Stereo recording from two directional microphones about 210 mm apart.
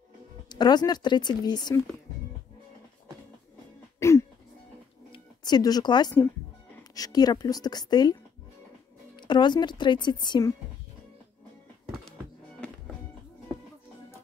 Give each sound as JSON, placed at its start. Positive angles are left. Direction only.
{"t": 0.5, "sound": "speech", "side_deg": 20}
{"t": 4.0, "sound": "music", "side_deg": 15}
{"t": 5.1, "sound": "speech", "side_deg": 20}
{"t": 12.5, "sound": "music", "side_deg": 5}